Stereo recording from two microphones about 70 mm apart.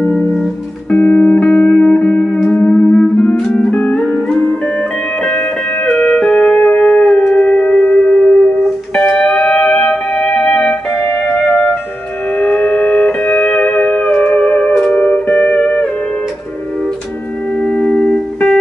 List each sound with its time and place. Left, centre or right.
0.8 s music: centre
9.0 s music: centre
12.3 s music: centre
17.6 s music: centre